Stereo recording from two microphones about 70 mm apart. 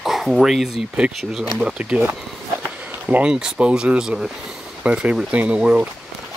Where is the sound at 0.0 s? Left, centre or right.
Centre.